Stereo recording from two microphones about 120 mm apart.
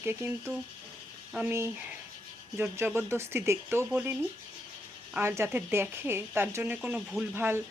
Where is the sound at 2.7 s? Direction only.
20° right (ahead or behind).